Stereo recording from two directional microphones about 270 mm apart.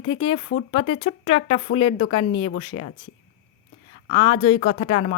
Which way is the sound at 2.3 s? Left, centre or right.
Left.